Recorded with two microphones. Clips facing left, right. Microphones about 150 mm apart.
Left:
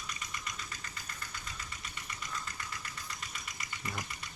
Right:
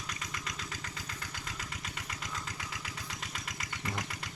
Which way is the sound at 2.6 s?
90° right.